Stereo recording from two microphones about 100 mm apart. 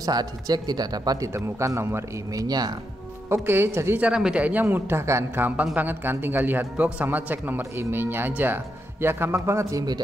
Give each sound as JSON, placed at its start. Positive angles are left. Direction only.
{"t": 0.0, "sound": "speech", "side_deg": -40}
{"t": 1.3, "sound": "a man's voice", "side_deg": -30}
{"t": 2.4, "sound": "speech", "side_deg": -40}
{"t": 3.3, "sound": "a man's voice", "side_deg": -25}
{"t": 4.0, "sound": "a man's voice", "side_deg": -10}